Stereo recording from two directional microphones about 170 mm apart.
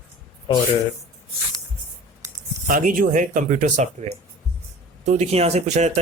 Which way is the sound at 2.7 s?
55° right (ahead or behind).